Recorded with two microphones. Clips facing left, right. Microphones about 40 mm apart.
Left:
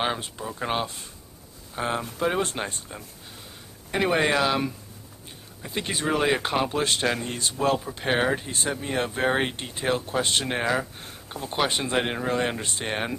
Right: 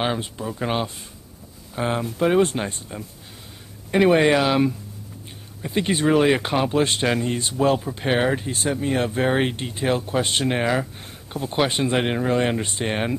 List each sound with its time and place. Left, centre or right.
0.0 s speech: centre
3.9 s speech: centre
6.8 s speech: right
7.6 s speech: centre